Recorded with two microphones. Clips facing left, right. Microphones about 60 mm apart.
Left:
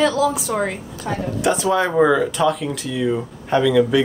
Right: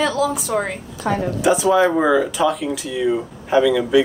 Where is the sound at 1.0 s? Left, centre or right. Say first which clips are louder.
Right 5 dB; right.